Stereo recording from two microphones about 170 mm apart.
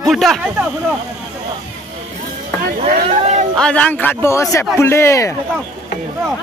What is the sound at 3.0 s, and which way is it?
Speech, 40° right (ahead or behind).